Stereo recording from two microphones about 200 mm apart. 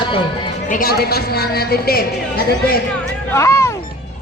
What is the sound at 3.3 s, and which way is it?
Speech, 15° left (ahead or behind).